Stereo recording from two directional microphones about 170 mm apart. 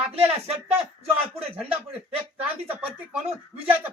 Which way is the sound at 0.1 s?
35° right (ahead or behind).